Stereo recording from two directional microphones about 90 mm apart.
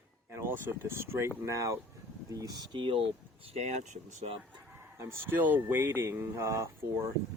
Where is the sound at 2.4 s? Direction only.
60° right (ahead or behind).